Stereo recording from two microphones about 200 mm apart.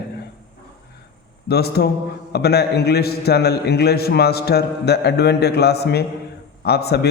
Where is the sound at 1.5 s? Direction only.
55° left (ahead or behind).